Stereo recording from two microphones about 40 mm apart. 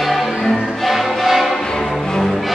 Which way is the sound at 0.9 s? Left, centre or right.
Centre.